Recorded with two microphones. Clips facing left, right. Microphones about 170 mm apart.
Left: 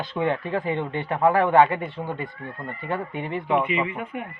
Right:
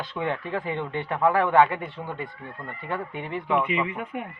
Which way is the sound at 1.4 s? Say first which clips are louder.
Left 2 dB; 35° left (ahead or behind).